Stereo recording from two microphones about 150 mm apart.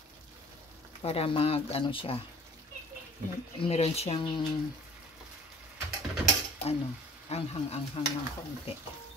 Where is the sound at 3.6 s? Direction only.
45° left (ahead or behind).